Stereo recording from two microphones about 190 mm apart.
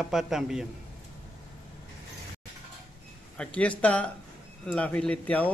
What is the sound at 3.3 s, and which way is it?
A man's voice, 5° left (ahead or behind).